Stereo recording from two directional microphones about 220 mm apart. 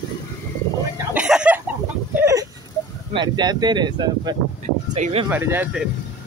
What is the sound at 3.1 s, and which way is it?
Speech, 20° right (ahead or behind).